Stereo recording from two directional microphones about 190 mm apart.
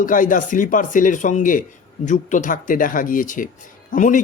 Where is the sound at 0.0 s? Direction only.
45° left (ahead or behind).